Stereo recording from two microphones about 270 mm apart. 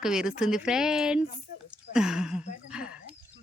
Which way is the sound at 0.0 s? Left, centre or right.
Centre.